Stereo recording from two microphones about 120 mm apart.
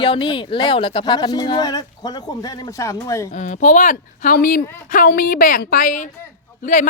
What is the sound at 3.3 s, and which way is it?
A woman's voice, 85° left.